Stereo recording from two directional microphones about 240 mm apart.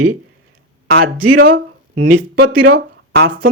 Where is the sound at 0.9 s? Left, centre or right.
Right.